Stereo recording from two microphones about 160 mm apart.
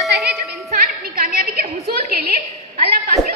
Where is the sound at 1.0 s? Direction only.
65° right (ahead or behind).